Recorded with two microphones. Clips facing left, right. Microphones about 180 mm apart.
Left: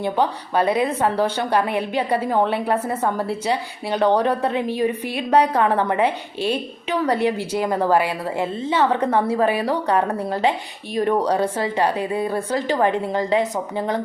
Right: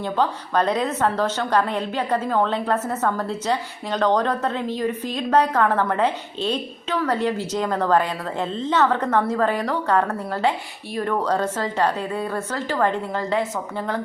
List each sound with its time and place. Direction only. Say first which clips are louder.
0.0 s a woman's voice: left 2 dB; 10° left (ahead or behind)